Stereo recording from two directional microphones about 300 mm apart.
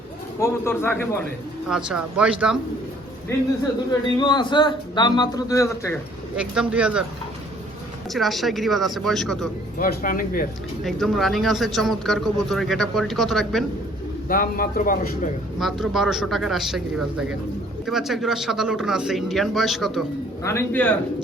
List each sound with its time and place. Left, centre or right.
0.3 s a man's voice: centre
1.7 s a man's voice: centre
4.2 s a man's voice: centre
6.3 s a man's voice: centre
8.1 s a man's voice: centre
9.7 s a man's voice: left
10.8 s a man's voice: centre
14.3 s a man's voice: left
15.5 s a man's voice: centre